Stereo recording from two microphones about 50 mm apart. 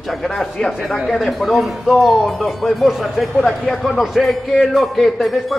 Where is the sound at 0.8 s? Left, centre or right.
Centre.